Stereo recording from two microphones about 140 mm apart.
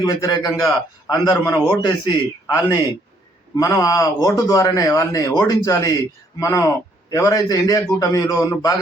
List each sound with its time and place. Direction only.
0.0 s speech: 25° left (ahead or behind)
1.6 s a man's voice: 35° left (ahead or behind)
2.5 s speech: 25° left (ahead or behind)